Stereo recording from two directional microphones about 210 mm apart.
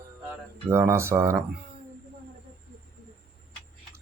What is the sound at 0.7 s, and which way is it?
Speech, 15° right (ahead or behind).